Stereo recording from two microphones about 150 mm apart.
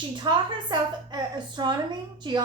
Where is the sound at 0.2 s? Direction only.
30° right (ahead or behind).